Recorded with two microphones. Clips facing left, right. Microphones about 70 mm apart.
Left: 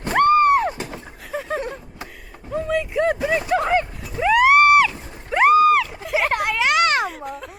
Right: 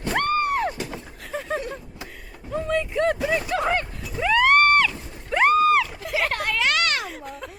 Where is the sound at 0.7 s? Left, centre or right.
Centre.